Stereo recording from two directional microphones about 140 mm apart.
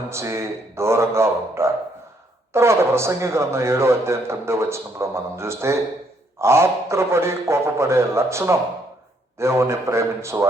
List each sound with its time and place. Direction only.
0.1 s speech: 20° right (ahead or behind)